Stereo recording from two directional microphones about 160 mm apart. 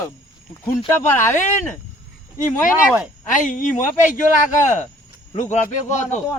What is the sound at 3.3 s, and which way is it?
Speech, 50° left (ahead or behind).